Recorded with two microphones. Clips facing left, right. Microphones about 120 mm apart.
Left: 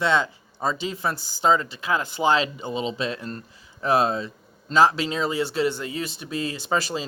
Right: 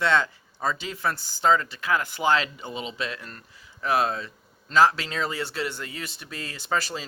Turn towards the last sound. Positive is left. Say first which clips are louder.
# left 3 dB
turn(degrees=20)  # may be behind; listen again after turning